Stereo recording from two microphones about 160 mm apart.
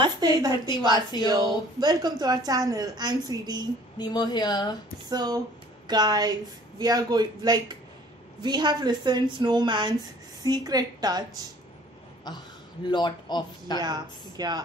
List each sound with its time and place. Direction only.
0.0 s a woman's voice: 25° right (ahead or behind)
4.0 s a man's voice: 25° left (ahead or behind)
5.1 s a woman's voice: 25° right (ahead or behind)
12.3 s a man's voice: 25° left (ahead or behind)
13.7 s a woman's voice: 25° right (ahead or behind)